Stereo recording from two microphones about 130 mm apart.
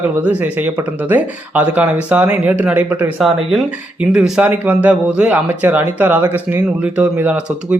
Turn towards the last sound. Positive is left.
turn(degrees=-10)  # may be behind; listen again after turning